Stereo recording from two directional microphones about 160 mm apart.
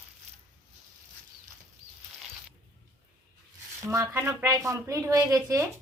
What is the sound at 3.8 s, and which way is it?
Speech, 20° right (ahead or behind).